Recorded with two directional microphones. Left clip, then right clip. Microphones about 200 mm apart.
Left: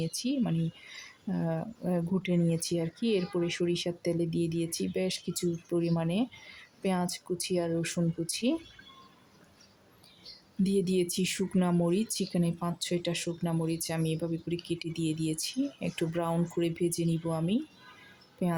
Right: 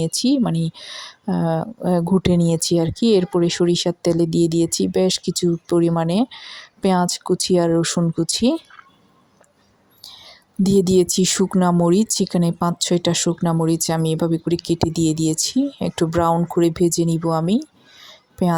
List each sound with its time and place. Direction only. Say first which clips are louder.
0.0 s speech: right 13 dB; 35° right (ahead or behind)
10.6 s speech: right 13 dB; 35° right (ahead or behind)